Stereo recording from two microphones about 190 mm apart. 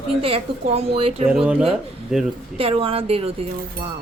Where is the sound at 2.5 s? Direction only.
30° right (ahead or behind).